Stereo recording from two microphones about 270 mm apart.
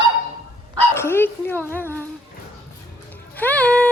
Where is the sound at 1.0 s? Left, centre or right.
Centre.